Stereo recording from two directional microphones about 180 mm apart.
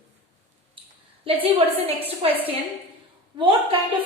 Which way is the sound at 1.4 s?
35° right (ahead or behind).